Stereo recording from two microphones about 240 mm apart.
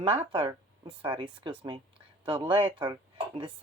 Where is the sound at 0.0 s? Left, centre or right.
Right.